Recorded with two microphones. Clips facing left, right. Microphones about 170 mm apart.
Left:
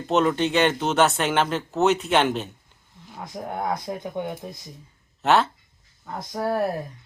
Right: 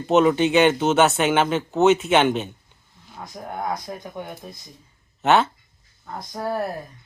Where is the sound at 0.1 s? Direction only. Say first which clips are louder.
Right 4 dB; 5° right (ahead or behind).